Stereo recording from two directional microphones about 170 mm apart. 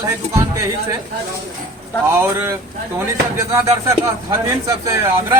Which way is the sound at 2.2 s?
15° right (ahead or behind).